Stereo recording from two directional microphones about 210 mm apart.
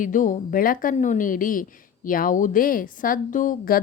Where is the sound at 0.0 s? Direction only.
40° left (ahead or behind).